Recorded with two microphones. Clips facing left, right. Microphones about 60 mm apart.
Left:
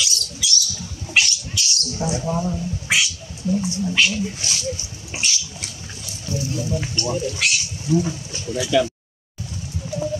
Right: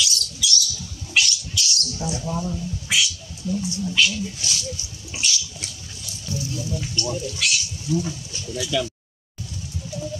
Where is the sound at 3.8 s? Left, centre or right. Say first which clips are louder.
Left 1 dB; left.